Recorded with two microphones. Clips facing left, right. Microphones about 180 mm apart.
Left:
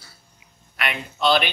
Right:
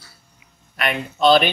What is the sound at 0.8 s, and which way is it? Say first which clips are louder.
Speech: right 5 dB; 50° right (ahead or behind).